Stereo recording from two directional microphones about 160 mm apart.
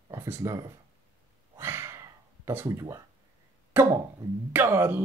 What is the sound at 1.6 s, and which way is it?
Gasp, 15° right (ahead or behind).